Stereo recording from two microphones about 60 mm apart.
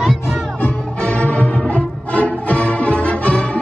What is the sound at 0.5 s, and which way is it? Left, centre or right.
Music, left.